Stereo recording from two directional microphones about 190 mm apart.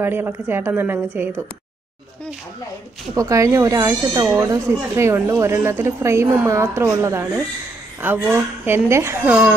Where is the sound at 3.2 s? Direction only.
15° right (ahead or behind).